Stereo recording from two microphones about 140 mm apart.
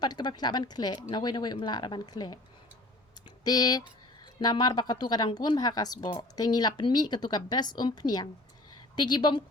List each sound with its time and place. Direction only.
0.0 s a woman's voice: 30° left (ahead or behind)